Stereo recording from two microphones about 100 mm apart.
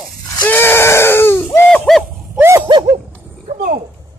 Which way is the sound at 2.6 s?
55° right (ahead or behind).